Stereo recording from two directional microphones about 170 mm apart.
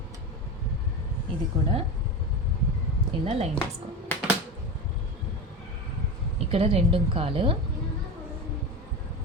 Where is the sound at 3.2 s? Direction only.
35° right (ahead or behind).